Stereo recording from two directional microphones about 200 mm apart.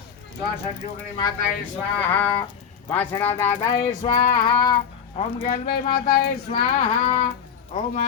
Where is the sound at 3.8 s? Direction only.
30° left (ahead or behind).